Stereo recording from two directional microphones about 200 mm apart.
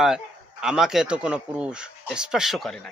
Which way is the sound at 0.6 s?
5° right (ahead or behind).